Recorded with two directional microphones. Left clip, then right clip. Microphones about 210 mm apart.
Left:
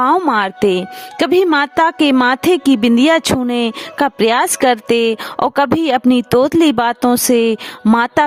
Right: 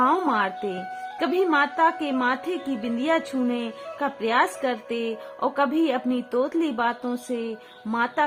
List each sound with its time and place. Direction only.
0.0 s speech: 45° left (ahead or behind)
0.3 s a woman's voice: 60° left (ahead or behind)